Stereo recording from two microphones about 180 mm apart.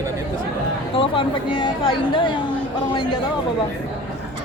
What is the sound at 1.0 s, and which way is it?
Speech, 25° left (ahead or behind).